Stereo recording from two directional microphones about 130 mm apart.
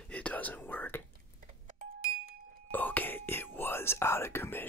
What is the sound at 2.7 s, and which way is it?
Whispering, 15° left (ahead or behind).